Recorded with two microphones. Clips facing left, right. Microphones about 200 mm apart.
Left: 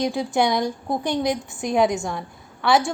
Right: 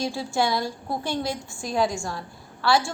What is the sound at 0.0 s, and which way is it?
A woman's voice, 20° left (ahead or behind).